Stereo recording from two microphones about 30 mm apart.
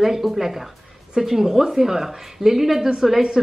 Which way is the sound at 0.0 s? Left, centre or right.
Centre.